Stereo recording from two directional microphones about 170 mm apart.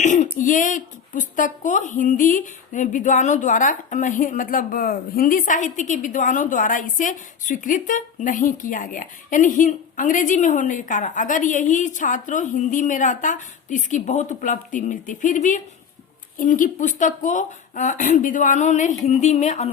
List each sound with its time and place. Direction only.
0.0 s speech: 45° left (ahead or behind)